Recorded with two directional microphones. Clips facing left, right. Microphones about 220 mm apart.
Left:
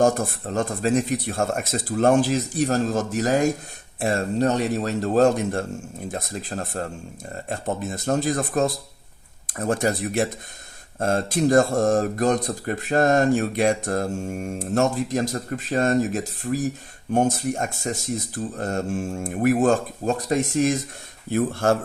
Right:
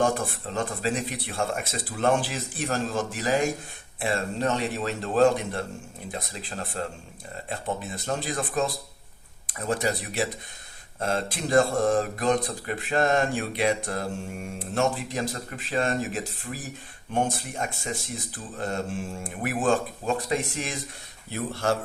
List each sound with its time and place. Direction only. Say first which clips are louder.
0.0 s a man's voice: left 5 dB; 45° left (ahead or behind)